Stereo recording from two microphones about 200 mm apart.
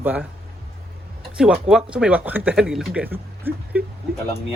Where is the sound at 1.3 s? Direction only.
5° right (ahead or behind).